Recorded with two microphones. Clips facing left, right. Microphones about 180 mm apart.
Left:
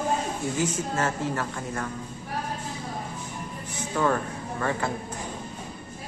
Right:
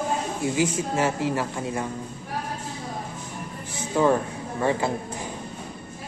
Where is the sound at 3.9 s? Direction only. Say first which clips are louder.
Right 4 dB; 15° right (ahead or behind).